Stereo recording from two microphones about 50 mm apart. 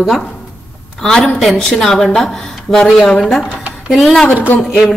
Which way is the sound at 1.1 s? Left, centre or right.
Centre.